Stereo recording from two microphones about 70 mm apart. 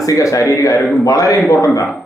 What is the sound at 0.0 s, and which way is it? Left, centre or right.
A man's voice, left.